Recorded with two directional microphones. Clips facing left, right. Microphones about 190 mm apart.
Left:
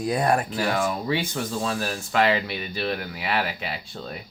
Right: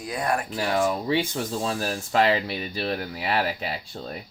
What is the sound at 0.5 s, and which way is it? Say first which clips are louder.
Speech: right 1 dB; 30° right (ahead or behind).